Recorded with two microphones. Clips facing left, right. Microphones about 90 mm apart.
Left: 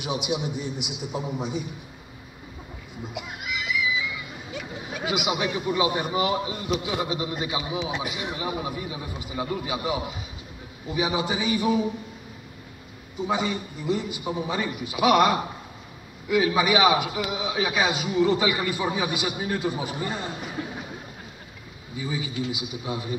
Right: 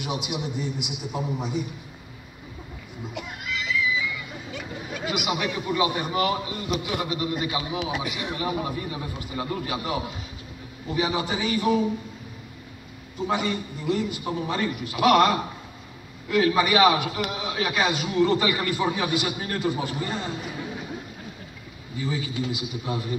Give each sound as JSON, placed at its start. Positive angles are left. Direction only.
{"t": 0.8, "sound": "a man's voice", "side_deg": 15}
{"t": 3.2, "sound": "neigh", "side_deg": 10}
{"t": 4.9, "sound": "a man's voice", "side_deg": 15}
{"t": 13.3, "sound": "a man's voice", "side_deg": 15}
{"t": 21.9, "sound": "a man's voice", "side_deg": 10}